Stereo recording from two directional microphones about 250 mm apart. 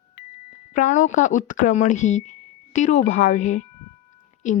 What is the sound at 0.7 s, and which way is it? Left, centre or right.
A woman's voice, left.